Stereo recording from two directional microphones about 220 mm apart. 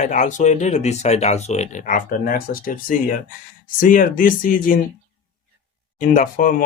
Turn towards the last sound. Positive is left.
turn(degrees=35)  # may be behind; listen again after turning